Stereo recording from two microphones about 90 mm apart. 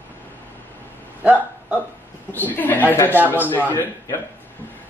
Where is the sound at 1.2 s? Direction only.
15° right (ahead or behind).